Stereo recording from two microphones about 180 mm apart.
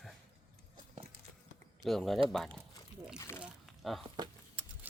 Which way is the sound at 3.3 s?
5° right (ahead or behind).